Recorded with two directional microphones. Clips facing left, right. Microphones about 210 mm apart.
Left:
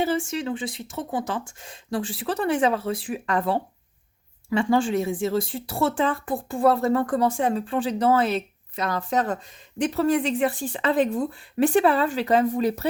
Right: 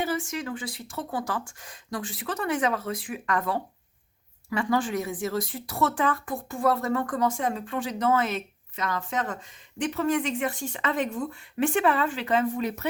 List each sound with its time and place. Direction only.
0.0 s speech: 30° left (ahead or behind)